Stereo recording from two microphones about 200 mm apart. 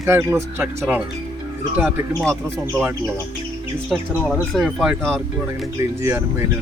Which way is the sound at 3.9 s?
Centre (ahead or behind).